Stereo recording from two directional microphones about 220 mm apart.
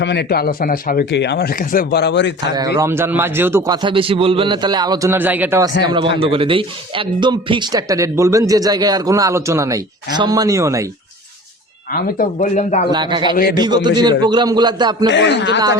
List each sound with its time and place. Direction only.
0.0 s speech: 50° left (ahead or behind)
2.6 s speech: 15° right (ahead or behind)
6.1 s speech: 25° right (ahead or behind)
11.9 s speech: 40° left (ahead or behind)
12.9 s a man's voice: 20° right (ahead or behind)
15.1 s speech: 50° left (ahead or behind)